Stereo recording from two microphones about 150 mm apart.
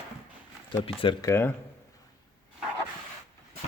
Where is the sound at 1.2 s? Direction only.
15° left (ahead or behind).